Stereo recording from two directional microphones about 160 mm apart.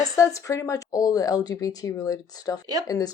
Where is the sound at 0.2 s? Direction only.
20° left (ahead or behind).